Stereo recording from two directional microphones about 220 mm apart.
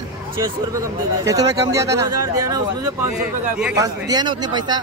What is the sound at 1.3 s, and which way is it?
Speech, 15° right (ahead or behind).